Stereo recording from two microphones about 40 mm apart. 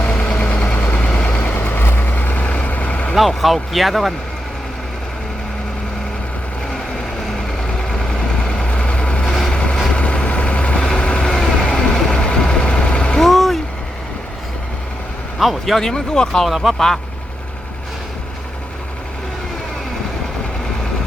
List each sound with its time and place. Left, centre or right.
0.0 s vehicle: left
1.5 s vehicle: left
2.0 s vehicle: left
3.2 s speech: centre
8.4 s vehicle: left
9.2 s vehicle: centre
9.5 s vehicle: left
13.2 s vehicle: centre
15.4 s speech: centre
16.6 s speech: centre